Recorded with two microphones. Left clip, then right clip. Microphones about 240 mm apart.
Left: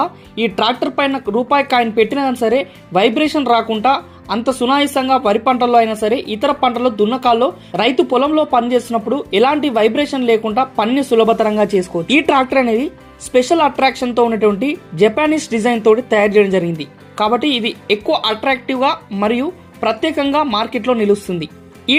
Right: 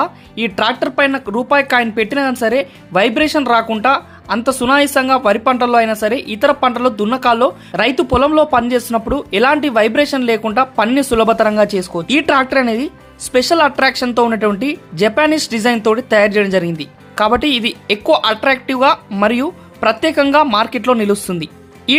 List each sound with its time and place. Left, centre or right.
0.0 s speech: centre